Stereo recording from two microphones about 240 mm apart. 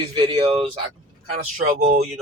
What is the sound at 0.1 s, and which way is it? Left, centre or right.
Speech, right.